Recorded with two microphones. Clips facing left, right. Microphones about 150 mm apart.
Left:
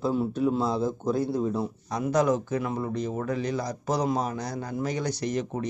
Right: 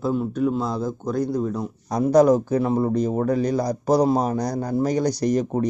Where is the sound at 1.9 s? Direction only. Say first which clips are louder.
Right 8 dB; 35° right (ahead or behind).